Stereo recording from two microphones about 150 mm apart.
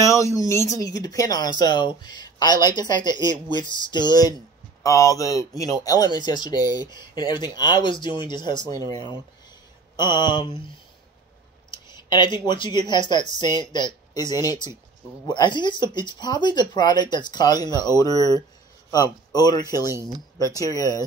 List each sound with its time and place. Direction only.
0.0 s speech: 20° left (ahead or behind)
11.7 s clicking: 30° left (ahead or behind)
12.4 s speech: 30° left (ahead or behind)
19.9 s speech: 20° right (ahead or behind)
20.3 s speech: 25° left (ahead or behind)